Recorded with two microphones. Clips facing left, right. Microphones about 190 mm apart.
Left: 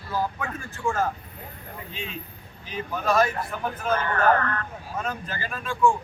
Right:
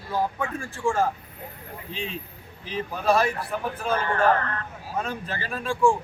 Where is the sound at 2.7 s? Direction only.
30° right (ahead or behind).